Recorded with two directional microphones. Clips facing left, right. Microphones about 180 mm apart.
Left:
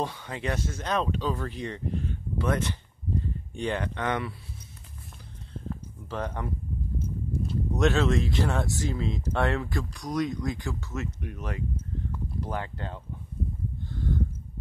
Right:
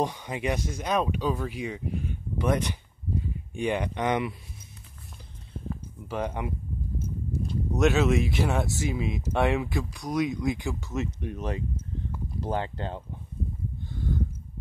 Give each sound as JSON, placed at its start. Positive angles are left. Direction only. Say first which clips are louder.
{"t": 0.0, "sound": "speech", "louder": "right 3 dB", "side_deg": -15}
{"t": 5.7, "sound": "a sound", "louder": "right 1 dB", "side_deg": -10}
{"t": 7.4, "sound": "speech", "louder": "right 1 dB", "side_deg": -5}